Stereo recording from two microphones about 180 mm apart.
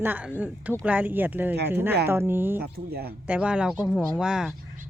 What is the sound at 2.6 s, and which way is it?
Speech, 60° right (ahead or behind).